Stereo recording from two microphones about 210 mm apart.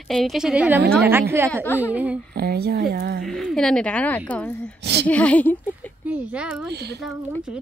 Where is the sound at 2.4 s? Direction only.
50° right (ahead or behind).